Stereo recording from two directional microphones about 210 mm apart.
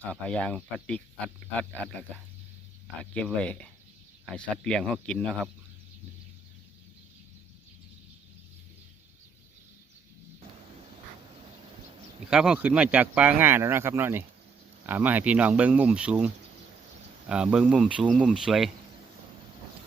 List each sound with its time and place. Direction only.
0.1 s speech: 5° left (ahead or behind)
12.3 s speech: 5° right (ahead or behind)